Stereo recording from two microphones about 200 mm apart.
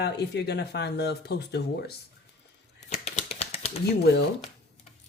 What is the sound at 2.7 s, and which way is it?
Typewriter, 35° left (ahead or behind).